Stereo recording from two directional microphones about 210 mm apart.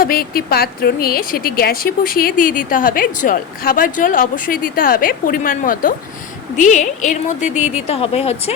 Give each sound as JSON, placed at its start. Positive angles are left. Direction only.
{"t": 0.0, "sound": "a woman's voice", "side_deg": 45}